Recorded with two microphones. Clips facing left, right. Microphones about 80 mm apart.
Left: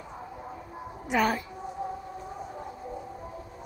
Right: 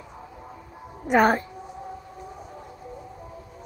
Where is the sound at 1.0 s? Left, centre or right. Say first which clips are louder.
Right 7 dB; right.